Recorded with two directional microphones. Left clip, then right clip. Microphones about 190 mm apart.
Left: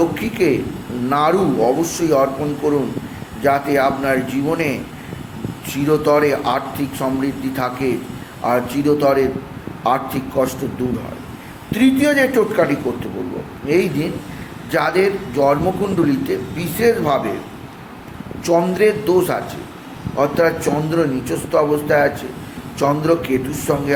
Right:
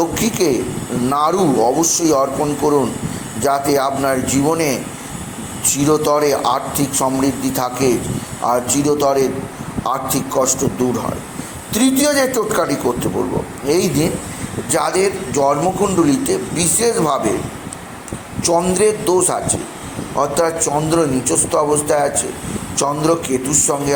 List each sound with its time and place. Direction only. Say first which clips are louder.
0.0 s a sound: even; 15° right (ahead or behind)
1.1 s a man's voice: even; 15° right (ahead or behind)
11.7 s a man's voice: even; 20° right (ahead or behind)
18.4 s a man's voice: even; 15° right (ahead or behind)